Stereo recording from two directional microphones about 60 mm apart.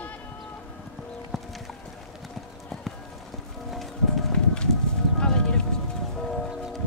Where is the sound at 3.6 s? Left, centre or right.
Centre.